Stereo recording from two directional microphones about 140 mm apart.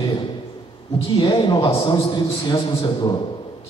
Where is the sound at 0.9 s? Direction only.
40° left (ahead or behind).